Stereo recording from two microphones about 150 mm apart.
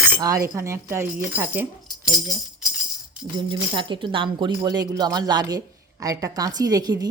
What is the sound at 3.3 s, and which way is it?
A woman's voice, 30° right (ahead or behind).